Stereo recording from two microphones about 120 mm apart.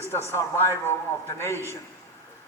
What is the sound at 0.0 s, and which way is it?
A man's voice, 20° left (ahead or behind).